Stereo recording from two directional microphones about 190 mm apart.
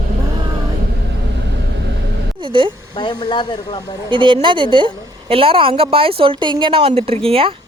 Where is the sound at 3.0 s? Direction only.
25° left (ahead or behind).